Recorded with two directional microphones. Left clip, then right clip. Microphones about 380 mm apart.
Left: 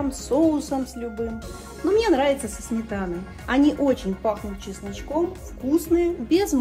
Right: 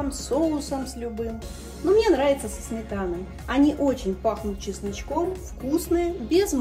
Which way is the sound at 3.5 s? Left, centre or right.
Left.